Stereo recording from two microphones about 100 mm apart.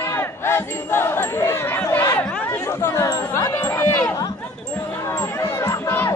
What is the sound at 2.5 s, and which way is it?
Chatter, 25° left (ahead or behind).